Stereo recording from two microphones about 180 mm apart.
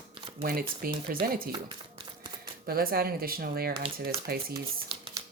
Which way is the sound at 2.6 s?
55° right (ahead or behind).